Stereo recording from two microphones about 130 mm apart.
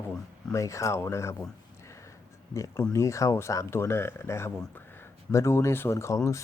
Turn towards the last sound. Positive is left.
turn(degrees=20)  # may be behind; listen again after turning